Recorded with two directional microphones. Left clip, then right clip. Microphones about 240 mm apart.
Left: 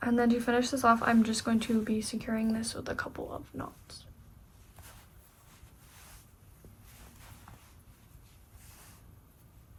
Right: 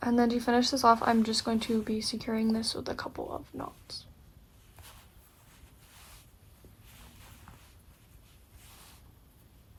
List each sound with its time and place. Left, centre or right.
0.0 s speech: centre